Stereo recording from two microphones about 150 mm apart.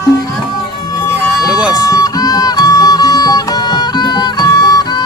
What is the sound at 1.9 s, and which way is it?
Music, 25° left (ahead or behind).